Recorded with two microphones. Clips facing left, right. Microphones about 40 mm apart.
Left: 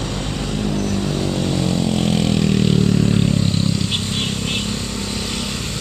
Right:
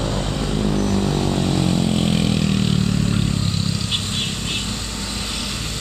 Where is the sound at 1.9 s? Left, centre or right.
Centre.